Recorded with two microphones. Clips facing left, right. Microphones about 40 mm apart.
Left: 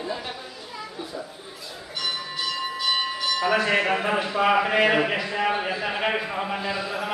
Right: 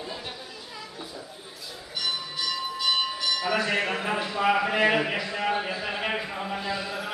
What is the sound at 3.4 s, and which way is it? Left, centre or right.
A man's voice, centre.